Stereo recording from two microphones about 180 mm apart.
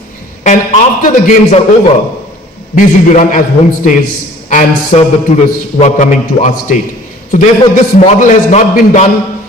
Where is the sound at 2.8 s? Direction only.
45° left (ahead or behind).